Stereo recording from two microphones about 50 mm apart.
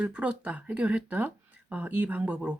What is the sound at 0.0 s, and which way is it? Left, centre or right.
Speech, right.